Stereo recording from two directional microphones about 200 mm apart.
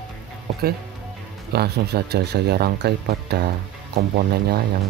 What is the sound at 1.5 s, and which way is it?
Speech, 55° right (ahead or behind).